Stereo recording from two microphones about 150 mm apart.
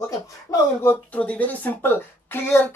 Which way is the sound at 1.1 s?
10° left (ahead or behind).